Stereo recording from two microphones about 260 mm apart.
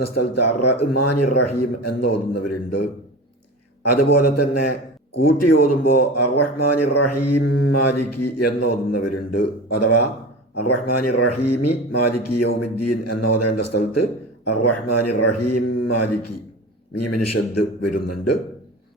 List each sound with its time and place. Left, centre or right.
0.0 s speech: left
3.8 s speech: left